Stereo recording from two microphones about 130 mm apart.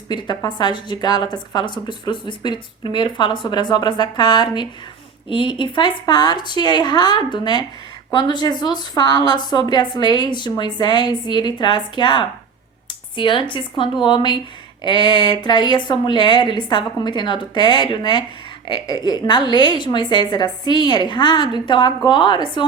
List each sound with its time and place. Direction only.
0.1 s a woman's voice: 35° left (ahead or behind)